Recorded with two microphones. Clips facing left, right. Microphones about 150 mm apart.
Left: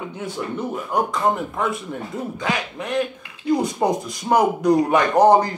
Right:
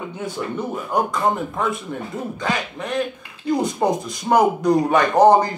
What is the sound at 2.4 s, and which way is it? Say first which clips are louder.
Speech: right 1 dB; 10° left (ahead or behind).